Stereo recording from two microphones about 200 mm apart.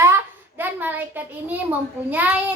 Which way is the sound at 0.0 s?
10° right (ahead or behind).